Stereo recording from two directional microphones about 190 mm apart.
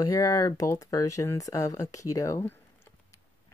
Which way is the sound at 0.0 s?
20° left (ahead or behind).